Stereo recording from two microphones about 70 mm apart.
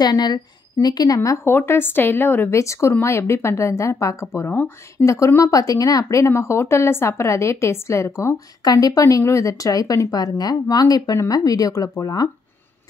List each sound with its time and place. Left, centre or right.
0.0 s a woman's voice: left
1.4 s speech: left
2.5 s speech: left
8.6 s speech: left
9.0 s speech: left
11.2 s speech: left